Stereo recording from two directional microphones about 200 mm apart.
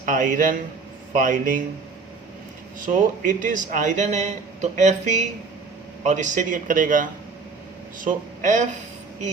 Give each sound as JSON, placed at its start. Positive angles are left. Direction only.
{"t": 0.0, "sound": "a man's voice", "side_deg": -40}
{"t": 2.7, "sound": "a man's voice", "side_deg": -40}